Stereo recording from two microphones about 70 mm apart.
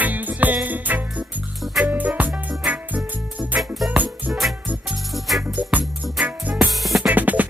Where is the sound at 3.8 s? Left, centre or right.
Centre.